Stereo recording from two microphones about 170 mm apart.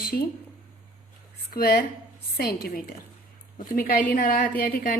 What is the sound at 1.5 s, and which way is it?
A woman's voice, 60° left (ahead or behind).